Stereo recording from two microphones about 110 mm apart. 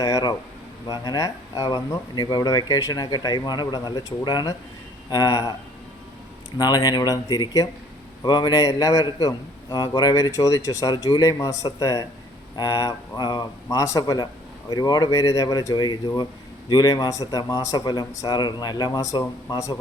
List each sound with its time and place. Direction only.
0.0 s a man's voice: 35° left (ahead or behind)
6.6 s a man's voice: 40° left (ahead or behind)